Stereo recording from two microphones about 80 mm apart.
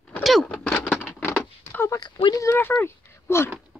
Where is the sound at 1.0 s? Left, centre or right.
Left.